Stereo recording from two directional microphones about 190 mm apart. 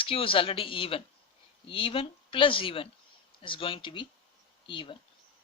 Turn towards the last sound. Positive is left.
turn(degrees=25)  # may be behind; listen again after turning